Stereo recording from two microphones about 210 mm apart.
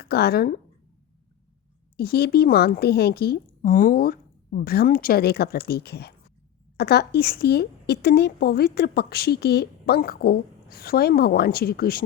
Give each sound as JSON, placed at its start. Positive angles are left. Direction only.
{"t": 0.0, "sound": "speech", "side_deg": 45}
{"t": 2.0, "sound": "a woman's voice", "side_deg": 50}